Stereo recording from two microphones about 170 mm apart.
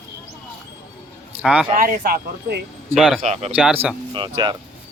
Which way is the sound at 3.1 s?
40° right (ahead or behind).